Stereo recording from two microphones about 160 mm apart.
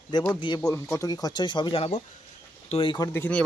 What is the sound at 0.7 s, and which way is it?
Speech, 15° left (ahead or behind).